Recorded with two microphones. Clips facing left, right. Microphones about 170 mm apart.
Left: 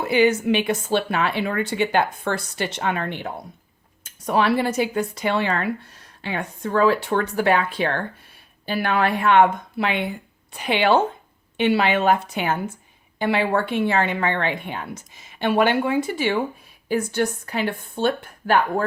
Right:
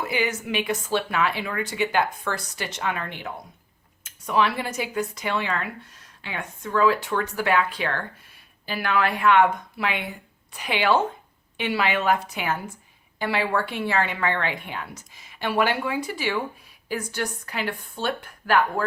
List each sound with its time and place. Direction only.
0.0 s a woman's voice: 30° left (ahead or behind)